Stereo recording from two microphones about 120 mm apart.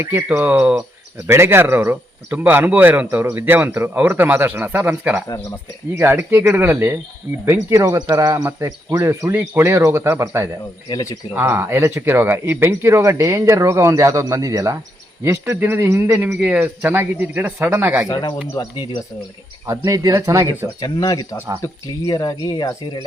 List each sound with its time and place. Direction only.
0.0 s speech: 25° right (ahead or behind)
6.0 s speech: 20° right (ahead or behind)
10.8 s speech: 30° left (ahead or behind)
11.3 s speech: 20° right (ahead or behind)
18.1 s speech: 35° left (ahead or behind)
19.6 s speech: 25° right (ahead or behind)
20.8 s speech: 35° left (ahead or behind)